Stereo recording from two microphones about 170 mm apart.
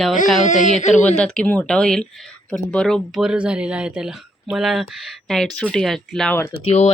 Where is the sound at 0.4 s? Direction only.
45° left (ahead or behind).